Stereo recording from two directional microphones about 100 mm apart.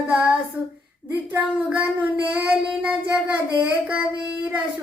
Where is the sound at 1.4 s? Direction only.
15° right (ahead or behind).